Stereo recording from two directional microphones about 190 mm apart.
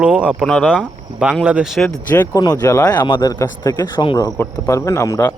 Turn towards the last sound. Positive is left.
turn(degrees=15)  # may be behind; listen again after turning